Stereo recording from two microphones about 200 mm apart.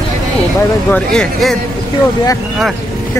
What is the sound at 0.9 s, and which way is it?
Speech, 5° left (ahead or behind).